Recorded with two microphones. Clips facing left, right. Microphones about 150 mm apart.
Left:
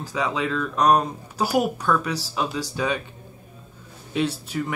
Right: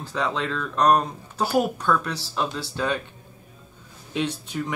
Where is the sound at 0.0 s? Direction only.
5° left (ahead or behind).